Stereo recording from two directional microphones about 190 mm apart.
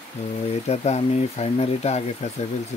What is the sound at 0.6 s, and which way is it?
Speech, 35° left (ahead or behind).